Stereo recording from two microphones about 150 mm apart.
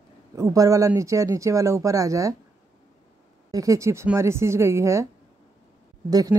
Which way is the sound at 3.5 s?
20° right (ahead or behind).